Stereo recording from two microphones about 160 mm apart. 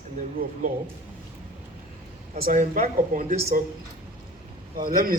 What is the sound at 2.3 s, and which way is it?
A man's voice, 55° right (ahead or behind).